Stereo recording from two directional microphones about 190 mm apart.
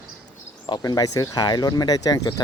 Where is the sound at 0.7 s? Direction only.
20° left (ahead or behind).